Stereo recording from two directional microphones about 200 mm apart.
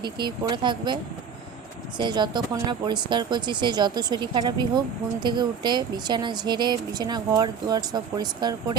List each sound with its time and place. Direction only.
0.0 s a woman's voice: 20° right (ahead or behind)
2.0 s a woman's voice: 20° right (ahead or behind)